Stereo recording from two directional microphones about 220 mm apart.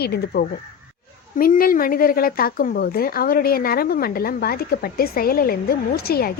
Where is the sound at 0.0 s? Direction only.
45° left (ahead or behind).